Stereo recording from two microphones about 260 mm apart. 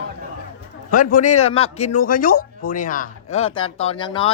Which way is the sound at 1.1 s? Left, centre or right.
Left.